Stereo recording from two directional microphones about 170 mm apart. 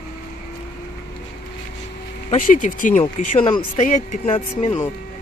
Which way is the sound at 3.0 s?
25° left (ahead or behind).